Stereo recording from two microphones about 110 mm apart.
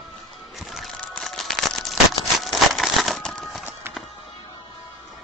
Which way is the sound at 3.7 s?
20° right (ahead or behind).